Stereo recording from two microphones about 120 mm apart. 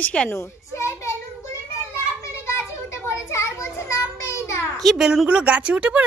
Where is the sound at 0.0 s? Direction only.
10° left (ahead or behind).